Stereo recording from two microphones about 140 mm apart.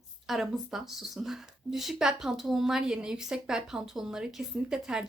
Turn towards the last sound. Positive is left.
turn(degrees=-5)  # may be behind; listen again after turning